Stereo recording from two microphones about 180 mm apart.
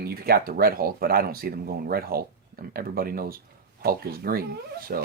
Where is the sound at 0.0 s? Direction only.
55° right (ahead or behind).